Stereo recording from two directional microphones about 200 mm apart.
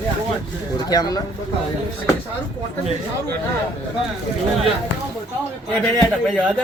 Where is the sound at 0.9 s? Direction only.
20° left (ahead or behind).